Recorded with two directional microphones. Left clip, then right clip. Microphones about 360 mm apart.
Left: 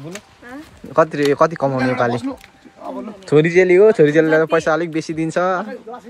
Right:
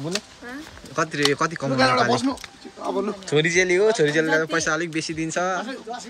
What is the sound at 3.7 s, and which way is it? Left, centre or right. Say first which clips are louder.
Speech: left 10 dB; left.